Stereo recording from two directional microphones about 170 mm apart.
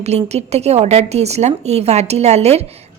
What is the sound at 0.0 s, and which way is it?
Speech, 40° right (ahead or behind).